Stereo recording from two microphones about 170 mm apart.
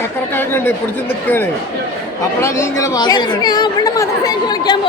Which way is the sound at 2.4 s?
15° left (ahead or behind).